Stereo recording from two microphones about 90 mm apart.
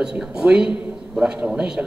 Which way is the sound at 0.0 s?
10° right (ahead or behind).